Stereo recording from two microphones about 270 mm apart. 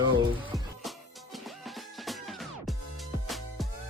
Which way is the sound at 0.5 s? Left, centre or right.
Centre.